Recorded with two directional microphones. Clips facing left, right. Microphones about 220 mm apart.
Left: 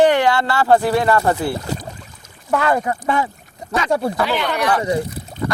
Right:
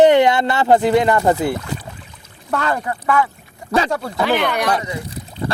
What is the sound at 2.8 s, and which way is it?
Speech, 25° left (ahead or behind).